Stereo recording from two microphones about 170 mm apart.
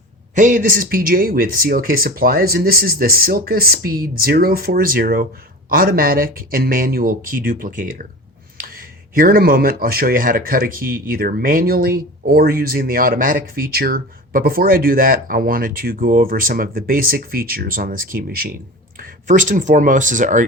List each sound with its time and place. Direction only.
0.3 s speech: 50° right (ahead or behind)